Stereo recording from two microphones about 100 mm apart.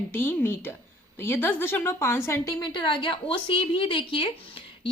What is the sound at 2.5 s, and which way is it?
A woman's voice, 50° left (ahead or behind).